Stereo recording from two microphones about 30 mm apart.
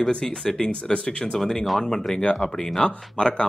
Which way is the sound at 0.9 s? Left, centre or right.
Left.